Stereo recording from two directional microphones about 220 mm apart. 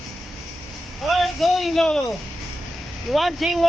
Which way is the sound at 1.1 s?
Centre (ahead or behind).